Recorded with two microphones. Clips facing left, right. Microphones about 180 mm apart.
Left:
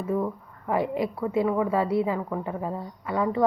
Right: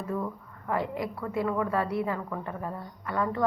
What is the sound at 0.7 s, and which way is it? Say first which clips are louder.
A woman's voice: left 5 dB; 20° left (ahead or behind).